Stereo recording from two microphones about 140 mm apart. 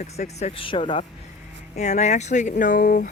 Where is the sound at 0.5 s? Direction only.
40° left (ahead or behind).